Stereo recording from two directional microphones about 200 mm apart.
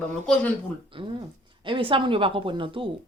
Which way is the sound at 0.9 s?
25° right (ahead or behind).